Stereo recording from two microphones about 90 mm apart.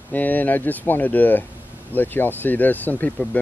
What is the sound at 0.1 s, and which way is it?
Speech, 20° left (ahead or behind).